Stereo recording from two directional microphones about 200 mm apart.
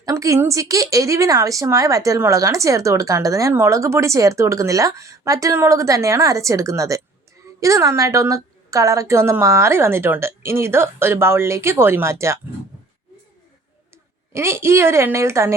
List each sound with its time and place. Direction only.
0.0 s speech: 15° right (ahead or behind)
14.3 s speech: 15° right (ahead or behind)